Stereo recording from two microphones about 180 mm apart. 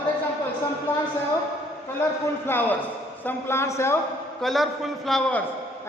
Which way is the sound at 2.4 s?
10° left (ahead or behind).